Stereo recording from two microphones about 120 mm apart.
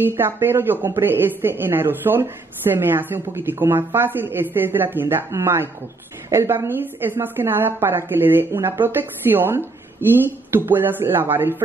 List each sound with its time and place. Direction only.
0.0 s speech: 20° right (ahead or behind)